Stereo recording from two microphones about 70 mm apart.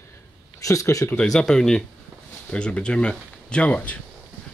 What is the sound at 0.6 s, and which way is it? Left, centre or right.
Speech, left.